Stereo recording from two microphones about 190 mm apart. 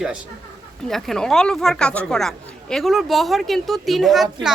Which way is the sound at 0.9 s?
Centre (ahead or behind).